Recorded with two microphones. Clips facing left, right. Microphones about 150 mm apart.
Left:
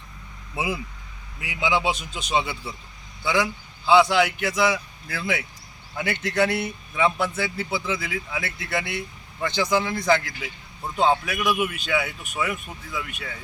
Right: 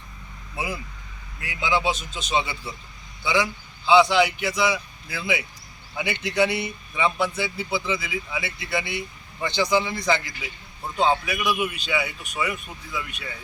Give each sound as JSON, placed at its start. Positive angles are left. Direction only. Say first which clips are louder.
{"t": 0.5, "sound": "a man's voice", "louder": "left 3 dB", "side_deg": 20}
{"t": 7.9, "sound": "a man's voice", "louder": "even", "side_deg": -10}